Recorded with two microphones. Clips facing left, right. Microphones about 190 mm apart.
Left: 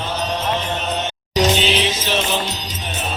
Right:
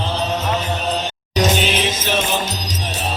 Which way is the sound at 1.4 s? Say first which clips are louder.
Even; 50° right (ahead or behind).